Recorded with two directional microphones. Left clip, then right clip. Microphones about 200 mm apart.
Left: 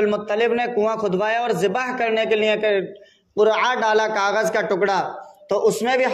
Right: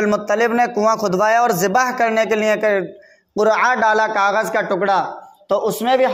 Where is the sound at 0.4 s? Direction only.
35° right (ahead or behind).